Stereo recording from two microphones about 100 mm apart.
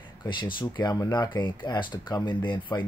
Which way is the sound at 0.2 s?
50° left (ahead or behind).